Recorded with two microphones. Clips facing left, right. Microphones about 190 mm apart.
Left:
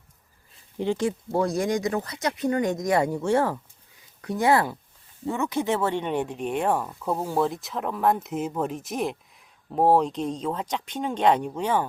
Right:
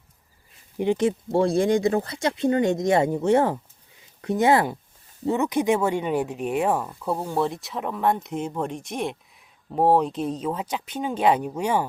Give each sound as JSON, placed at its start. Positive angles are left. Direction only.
{"t": 0.8, "sound": "speech", "side_deg": -20}